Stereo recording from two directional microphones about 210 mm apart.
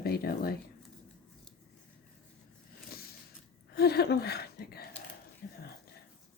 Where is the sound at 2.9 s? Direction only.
45° left (ahead or behind).